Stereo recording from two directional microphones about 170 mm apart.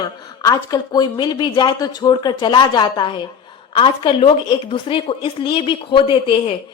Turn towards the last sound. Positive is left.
turn(degrees=30)  # may be behind; listen again after turning